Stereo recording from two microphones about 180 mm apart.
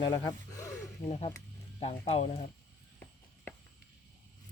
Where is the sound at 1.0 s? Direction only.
35° left (ahead or behind).